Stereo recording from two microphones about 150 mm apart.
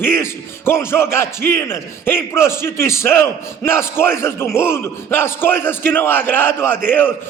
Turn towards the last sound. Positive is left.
turn(degrees=15)  # may be behind; listen again after turning